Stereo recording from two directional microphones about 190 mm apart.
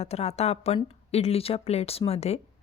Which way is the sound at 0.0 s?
35° left (ahead or behind).